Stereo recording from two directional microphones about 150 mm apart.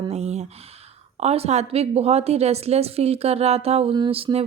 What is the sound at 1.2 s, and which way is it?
A woman's voice, 45° right (ahead or behind).